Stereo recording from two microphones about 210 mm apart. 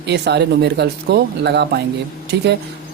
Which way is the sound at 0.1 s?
55° right (ahead or behind).